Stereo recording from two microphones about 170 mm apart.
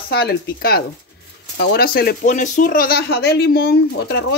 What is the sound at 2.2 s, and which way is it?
Speech, 50° left (ahead or behind).